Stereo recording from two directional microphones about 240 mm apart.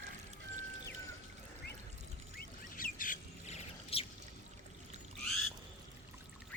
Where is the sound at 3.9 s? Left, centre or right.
Left.